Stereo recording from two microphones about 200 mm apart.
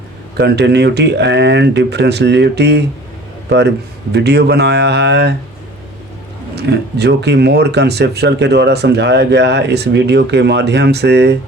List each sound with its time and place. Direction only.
0.3 s speech: 55° right (ahead or behind)
4.1 s speech: 55° right (ahead or behind)
6.6 s speech: 55° right (ahead or behind)